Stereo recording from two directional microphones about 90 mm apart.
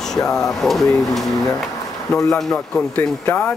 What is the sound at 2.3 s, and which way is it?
Speech, 5° left (ahead or behind).